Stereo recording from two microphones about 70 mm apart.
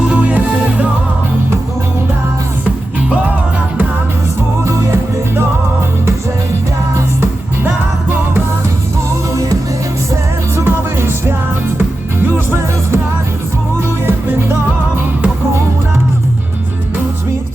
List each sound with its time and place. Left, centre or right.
0.1 s music: centre
4.6 s music: right
9.3 s music: right
10.6 s music: right
14.1 s music: right